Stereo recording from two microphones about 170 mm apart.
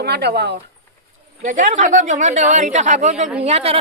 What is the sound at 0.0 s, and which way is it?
Speech, 80° right.